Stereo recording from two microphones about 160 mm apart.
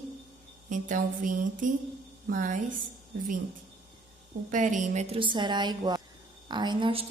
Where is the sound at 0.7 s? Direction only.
55° right (ahead or behind).